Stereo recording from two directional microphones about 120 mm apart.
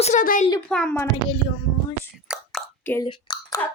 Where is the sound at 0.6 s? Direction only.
10° left (ahead or behind).